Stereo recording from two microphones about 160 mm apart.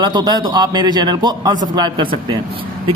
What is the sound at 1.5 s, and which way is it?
Speech, 55° right (ahead or behind).